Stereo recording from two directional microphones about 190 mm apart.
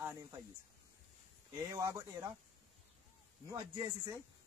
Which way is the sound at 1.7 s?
20° right (ahead or behind).